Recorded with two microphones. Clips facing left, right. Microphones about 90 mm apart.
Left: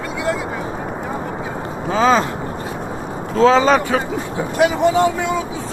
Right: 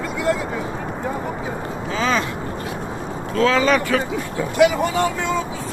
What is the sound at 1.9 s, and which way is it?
Speech, 35° left (ahead or behind).